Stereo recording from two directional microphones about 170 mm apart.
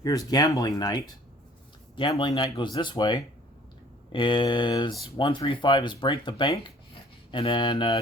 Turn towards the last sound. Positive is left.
turn(degrees=30)  # may be behind; listen again after turning